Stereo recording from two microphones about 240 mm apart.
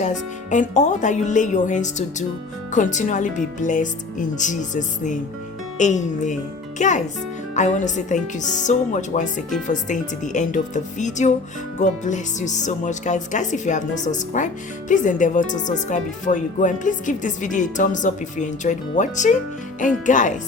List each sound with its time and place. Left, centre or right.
0.0 s a child's voice: left